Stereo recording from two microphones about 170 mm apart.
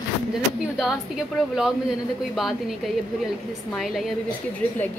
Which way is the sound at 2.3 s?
Centre (ahead or behind).